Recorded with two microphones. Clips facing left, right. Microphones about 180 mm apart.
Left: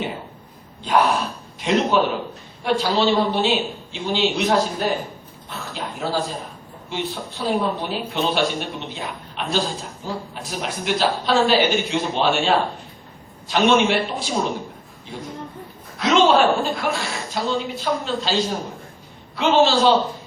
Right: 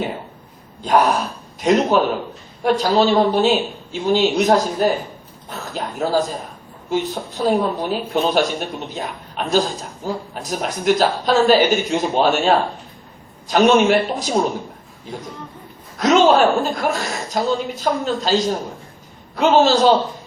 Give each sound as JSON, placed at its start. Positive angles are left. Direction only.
{"t": 0.8, "sound": "a man's voice", "side_deg": -40}
{"t": 5.5, "sound": "a sound", "side_deg": -40}
{"t": 6.9, "sound": "a man's voice", "side_deg": -45}